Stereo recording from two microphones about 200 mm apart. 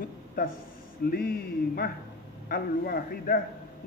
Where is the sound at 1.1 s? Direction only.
50° left (ahead or behind).